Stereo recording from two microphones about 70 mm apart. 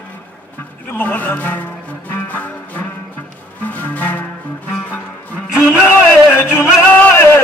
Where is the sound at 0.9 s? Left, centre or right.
Left.